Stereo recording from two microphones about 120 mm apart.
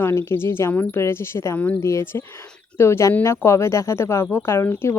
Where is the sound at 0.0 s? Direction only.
20° left (ahead or behind).